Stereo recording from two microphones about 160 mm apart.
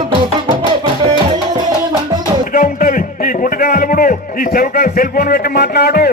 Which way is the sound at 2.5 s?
60° left (ahead or behind).